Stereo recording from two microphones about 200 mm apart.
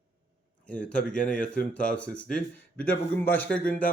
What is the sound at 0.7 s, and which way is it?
Speech, 5° left (ahead or behind).